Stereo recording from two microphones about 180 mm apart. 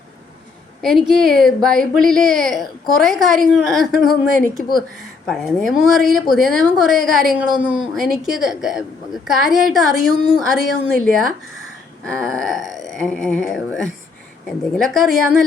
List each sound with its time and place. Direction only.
0.8 s speech: centre (ahead or behind)